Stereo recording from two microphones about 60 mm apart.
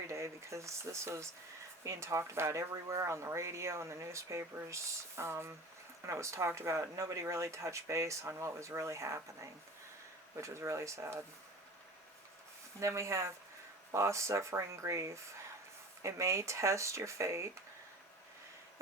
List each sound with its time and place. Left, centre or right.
0.1 s speech: right
12.8 s speech: right